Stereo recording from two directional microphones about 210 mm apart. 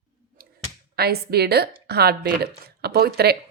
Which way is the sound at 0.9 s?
50° right (ahead or behind).